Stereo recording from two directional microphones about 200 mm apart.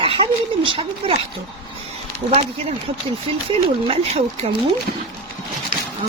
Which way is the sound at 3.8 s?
30° right (ahead or behind).